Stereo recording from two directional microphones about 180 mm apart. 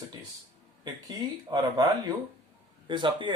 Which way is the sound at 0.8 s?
20° right (ahead or behind).